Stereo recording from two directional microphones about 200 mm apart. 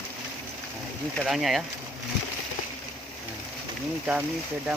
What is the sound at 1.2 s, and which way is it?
Speech, centre (ahead or behind).